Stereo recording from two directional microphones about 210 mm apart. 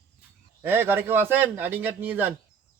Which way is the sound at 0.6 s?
10° right (ahead or behind).